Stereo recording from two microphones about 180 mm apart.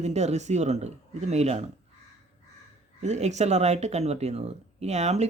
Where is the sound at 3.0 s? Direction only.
40° right (ahead or behind).